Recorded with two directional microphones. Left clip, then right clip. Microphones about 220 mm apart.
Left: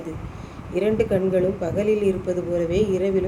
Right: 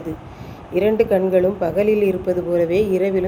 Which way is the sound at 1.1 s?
20° right (ahead or behind).